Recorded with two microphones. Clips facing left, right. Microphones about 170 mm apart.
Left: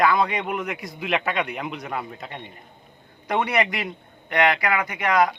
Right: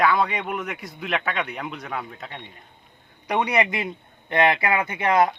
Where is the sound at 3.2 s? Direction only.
15° right (ahead or behind).